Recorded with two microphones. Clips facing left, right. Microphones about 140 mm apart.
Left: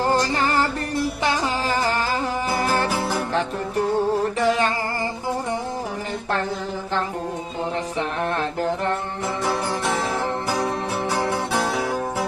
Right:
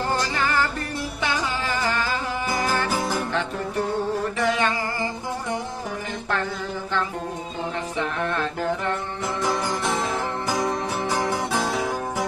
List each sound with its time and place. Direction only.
0.1 s music: 35° left (ahead or behind)
3.0 s music: centre (ahead or behind)
4.4 s music: 35° left (ahead or behind)
7.9 s music: 30° left (ahead or behind)
9.4 s music: 5° left (ahead or behind)